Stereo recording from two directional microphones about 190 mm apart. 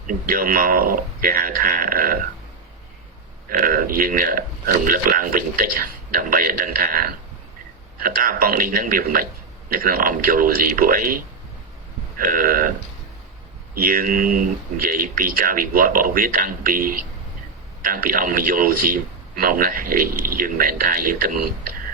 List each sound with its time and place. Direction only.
0.1 s speech: 50° right (ahead or behind)
3.5 s speech: 45° right (ahead or behind)
13.7 s speech: 50° right (ahead or behind)